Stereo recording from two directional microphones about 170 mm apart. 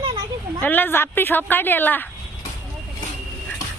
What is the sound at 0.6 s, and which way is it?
A woman's voice, 10° left (ahead or behind).